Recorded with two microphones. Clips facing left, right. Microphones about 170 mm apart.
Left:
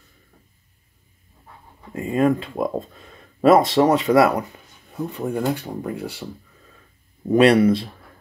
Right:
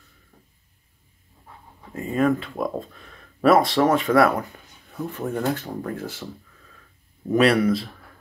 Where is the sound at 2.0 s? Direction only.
20° left (ahead or behind).